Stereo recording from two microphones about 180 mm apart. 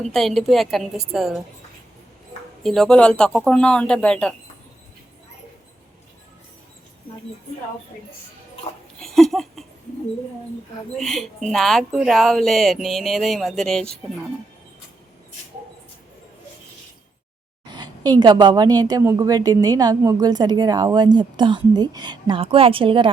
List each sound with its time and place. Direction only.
0.0 s a woman's voice: centre (ahead or behind)
2.6 s a woman's voice: centre (ahead or behind)
9.0 s a sound: centre (ahead or behind)
10.9 s a woman's voice: centre (ahead or behind)
17.7 s a woman's voice: 25° right (ahead or behind)